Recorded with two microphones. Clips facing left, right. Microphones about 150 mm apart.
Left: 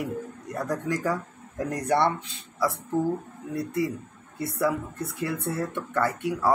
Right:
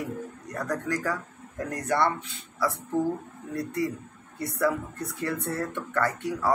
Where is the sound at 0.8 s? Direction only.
20° left (ahead or behind).